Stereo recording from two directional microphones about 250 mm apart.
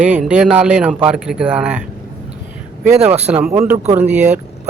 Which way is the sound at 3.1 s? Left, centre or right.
Right.